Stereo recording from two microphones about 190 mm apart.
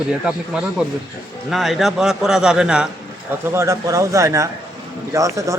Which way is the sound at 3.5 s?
15° right (ahead or behind).